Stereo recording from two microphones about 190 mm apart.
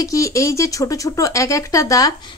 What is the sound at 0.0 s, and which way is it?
Speech, 15° left (ahead or behind).